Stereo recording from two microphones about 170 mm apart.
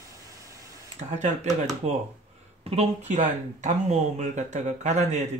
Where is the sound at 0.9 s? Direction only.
40° right (ahead or behind).